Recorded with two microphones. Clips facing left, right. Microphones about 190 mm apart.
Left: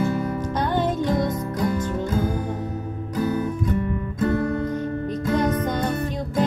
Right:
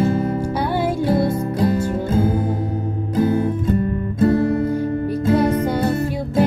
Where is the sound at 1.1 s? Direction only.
30° right (ahead or behind).